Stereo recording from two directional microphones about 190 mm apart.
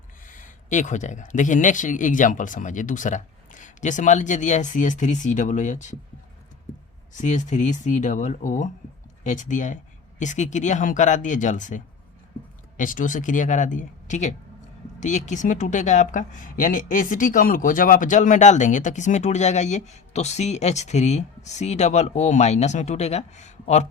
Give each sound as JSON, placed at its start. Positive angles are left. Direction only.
{"t": 0.3, "sound": "speech", "side_deg": 45}
{"t": 7.1, "sound": "speech", "side_deg": 40}